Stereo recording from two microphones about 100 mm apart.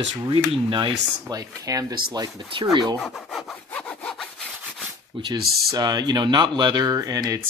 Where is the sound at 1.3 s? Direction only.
35° right (ahead or behind).